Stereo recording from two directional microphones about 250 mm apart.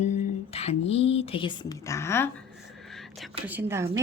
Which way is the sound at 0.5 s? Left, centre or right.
Left.